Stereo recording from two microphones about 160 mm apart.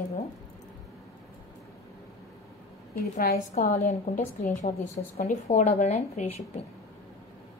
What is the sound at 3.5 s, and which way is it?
A woman's voice, 50° left (ahead or behind).